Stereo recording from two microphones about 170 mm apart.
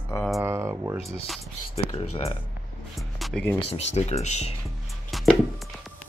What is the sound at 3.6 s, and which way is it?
Speech, 40° left (ahead or behind).